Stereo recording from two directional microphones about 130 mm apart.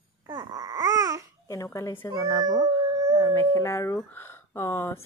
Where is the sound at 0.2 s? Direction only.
25° right (ahead or behind).